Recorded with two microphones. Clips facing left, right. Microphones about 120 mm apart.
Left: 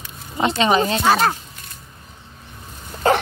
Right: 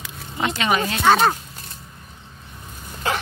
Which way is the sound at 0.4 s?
30° left (ahead or behind).